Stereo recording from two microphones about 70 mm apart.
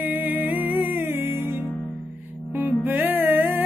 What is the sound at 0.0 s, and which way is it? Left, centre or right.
Music, right.